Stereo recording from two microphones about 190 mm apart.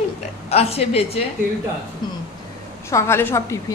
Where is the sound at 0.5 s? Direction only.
30° left (ahead or behind).